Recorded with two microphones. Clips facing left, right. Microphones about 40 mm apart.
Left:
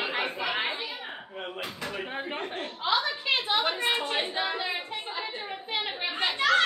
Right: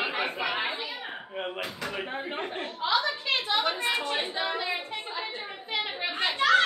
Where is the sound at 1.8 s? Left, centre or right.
Centre.